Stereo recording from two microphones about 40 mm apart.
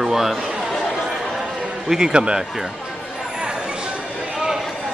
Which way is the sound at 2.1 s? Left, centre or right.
Right.